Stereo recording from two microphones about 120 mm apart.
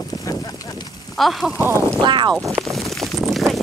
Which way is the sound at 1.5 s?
20° right (ahead or behind).